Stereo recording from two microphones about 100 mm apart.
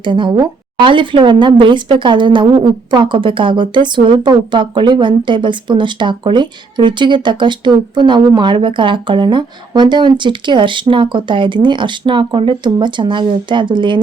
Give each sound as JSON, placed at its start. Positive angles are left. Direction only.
{"t": 0.0, "sound": "speech", "side_deg": -55}